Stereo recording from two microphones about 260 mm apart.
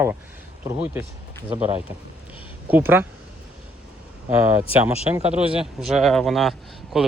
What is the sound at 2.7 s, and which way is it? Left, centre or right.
Speech, centre.